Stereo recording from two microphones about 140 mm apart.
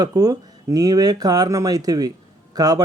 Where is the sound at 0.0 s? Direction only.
25° right (ahead or behind).